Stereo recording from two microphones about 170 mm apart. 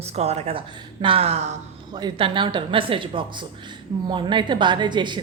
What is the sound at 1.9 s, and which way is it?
A woman's voice, 25° right (ahead or behind).